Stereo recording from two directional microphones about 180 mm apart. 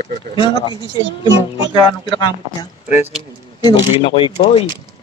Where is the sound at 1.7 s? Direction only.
25° left (ahead or behind).